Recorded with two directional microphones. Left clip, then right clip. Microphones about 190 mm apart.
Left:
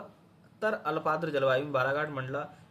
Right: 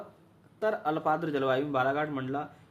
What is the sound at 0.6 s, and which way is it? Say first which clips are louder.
Speech: right 1 dB; 25° right (ahead or behind).